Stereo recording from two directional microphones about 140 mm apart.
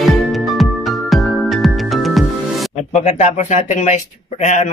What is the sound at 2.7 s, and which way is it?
A man's voice, 55° left (ahead or behind).